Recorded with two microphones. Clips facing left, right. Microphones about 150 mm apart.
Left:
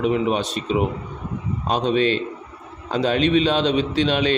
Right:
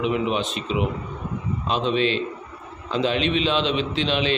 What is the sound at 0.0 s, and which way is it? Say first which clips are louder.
A man's voice: left 3 dB; 45° left (ahead or behind).